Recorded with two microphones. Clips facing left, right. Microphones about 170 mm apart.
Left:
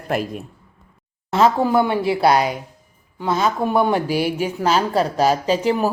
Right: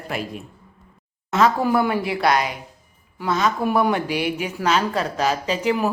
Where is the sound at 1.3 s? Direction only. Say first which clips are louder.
Left 2 dB; 25° left (ahead or behind).